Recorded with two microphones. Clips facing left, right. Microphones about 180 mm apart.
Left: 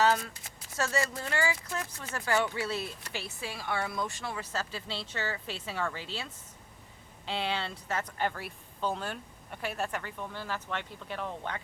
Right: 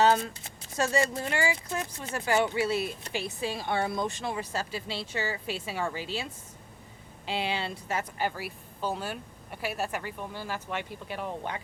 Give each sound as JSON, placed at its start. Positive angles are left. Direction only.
{"t": 0.0, "sound": "a sound", "side_deg": -25}
{"t": 0.8, "sound": "speech", "side_deg": -15}
{"t": 7.3, "sound": "speech", "side_deg": -10}